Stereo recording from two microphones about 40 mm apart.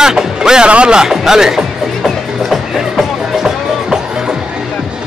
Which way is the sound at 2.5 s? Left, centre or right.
Centre.